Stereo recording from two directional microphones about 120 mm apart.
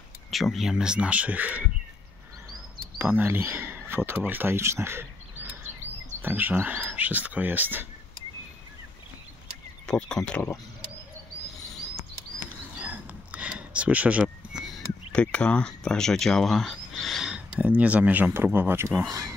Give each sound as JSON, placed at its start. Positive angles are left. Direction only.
{"t": 0.3, "sound": "speech", "side_deg": 0}
{"t": 3.0, "sound": "speech", "side_deg": -15}
{"t": 9.8, "sound": "speech", "side_deg": 5}
{"t": 12.8, "sound": "a sound", "side_deg": -10}
{"t": 15.1, "sound": "speech", "side_deg": 10}